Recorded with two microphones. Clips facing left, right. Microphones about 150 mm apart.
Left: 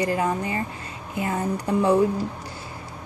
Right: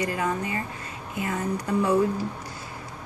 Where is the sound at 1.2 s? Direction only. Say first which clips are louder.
Left 3 dB; 30° left (ahead or behind).